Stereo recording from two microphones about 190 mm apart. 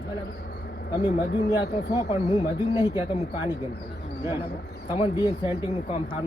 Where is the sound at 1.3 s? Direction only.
65° left (ahead or behind).